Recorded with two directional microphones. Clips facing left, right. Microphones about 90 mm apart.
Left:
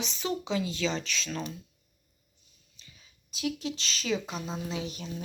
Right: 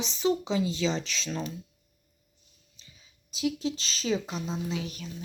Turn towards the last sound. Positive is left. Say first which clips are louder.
# right 2 dB
turn(degrees=25)  # may be behind; listen again after turning